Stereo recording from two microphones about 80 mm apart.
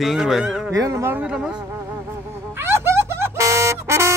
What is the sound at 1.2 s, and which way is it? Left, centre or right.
Speech, centre.